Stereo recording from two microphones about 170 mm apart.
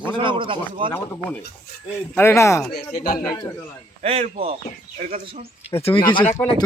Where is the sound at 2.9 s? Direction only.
60° left (ahead or behind).